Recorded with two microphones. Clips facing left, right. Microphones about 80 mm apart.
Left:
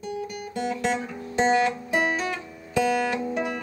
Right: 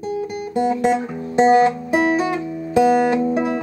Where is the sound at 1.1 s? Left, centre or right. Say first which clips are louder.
Right 8 dB; right.